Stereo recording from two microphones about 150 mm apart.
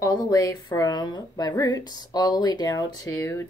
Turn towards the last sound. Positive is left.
turn(degrees=20)  # may be behind; listen again after turning